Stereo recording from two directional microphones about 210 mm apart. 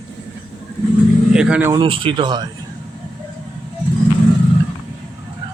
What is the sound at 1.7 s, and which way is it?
Speech, 25° right (ahead or behind).